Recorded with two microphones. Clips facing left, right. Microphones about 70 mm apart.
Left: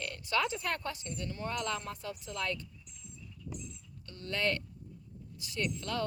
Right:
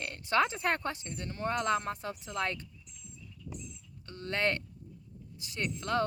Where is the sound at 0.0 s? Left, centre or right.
Right.